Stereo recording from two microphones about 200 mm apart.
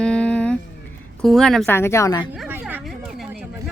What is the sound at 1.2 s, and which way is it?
A woman's voice, centre (ahead or behind).